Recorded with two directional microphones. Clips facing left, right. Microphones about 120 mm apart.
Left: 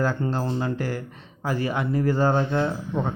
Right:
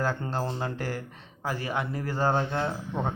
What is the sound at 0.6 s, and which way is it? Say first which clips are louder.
Speech: left 5 dB; 45° right (ahead or behind).